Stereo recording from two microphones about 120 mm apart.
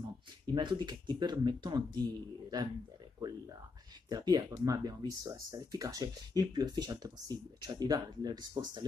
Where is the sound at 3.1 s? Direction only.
30° right (ahead or behind).